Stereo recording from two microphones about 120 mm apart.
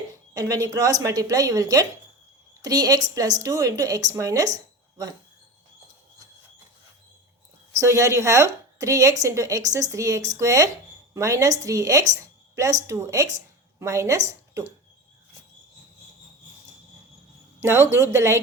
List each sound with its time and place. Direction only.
0.3 s a woman's voice: 25° right (ahead or behind)
4.5 s a sound: 30° right (ahead or behind)
7.8 s a woman's voice: 25° right (ahead or behind)
17.6 s speech: 20° right (ahead or behind)